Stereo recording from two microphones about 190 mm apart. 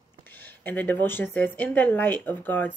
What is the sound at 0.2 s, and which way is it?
A woman's voice, 10° left (ahead or behind).